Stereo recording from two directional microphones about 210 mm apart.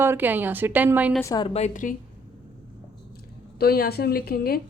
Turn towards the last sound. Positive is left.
turn(degrees=45)  # may be behind; listen again after turning